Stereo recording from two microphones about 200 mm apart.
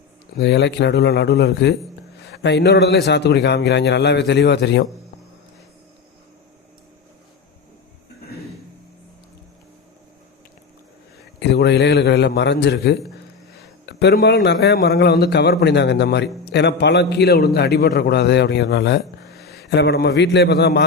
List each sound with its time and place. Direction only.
0.3 s a man's voice: 60° left (ahead or behind)
11.3 s a man's voice: 60° left (ahead or behind)